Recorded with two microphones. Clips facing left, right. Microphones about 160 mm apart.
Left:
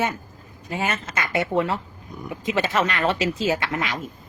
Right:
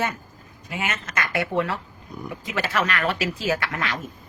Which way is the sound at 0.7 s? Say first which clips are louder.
Left 3 dB; 35° left (ahead or behind).